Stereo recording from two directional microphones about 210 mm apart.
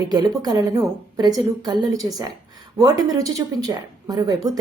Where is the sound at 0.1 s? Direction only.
20° right (ahead or behind).